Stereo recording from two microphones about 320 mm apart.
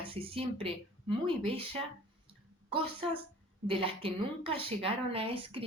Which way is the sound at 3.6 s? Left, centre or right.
Centre.